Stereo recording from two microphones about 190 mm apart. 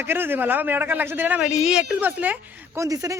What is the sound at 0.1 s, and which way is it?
A man's voice, 10° right (ahead or behind).